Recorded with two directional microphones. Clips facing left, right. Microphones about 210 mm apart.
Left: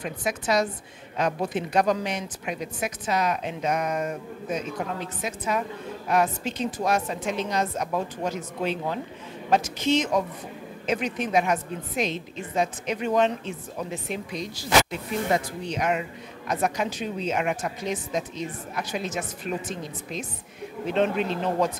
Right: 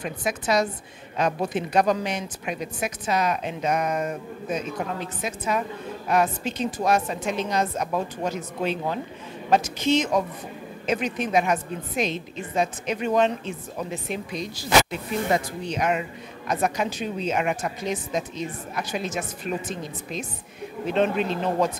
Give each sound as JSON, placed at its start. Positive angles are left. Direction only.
{"t": 0.0, "sound": "a woman's voice", "side_deg": -10}
{"t": 7.9, "sound": "a woman's voice", "side_deg": -20}
{"t": 9.5, "sound": "speech", "side_deg": -5}
{"t": 14.7, "sound": "speech", "side_deg": -10}
{"t": 20.9, "sound": "speech", "side_deg": -10}